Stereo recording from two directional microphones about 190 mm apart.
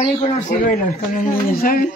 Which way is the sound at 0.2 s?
40° left (ahead or behind).